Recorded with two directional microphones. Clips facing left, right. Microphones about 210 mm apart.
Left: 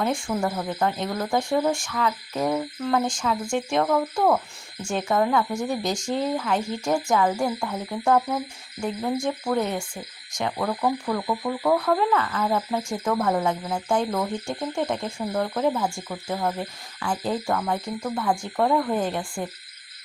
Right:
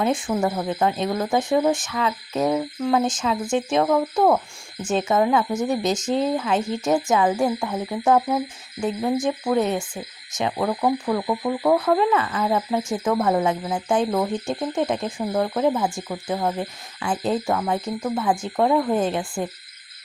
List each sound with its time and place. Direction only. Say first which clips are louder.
0.0 s speech: right 3 dB; 20° right (ahead or behind)